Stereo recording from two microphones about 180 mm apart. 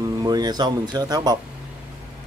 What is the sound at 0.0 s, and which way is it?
Speech, 20° right (ahead or behind).